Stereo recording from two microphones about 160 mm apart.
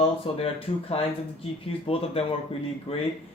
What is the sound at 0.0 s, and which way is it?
Speech, 40° left (ahead or behind).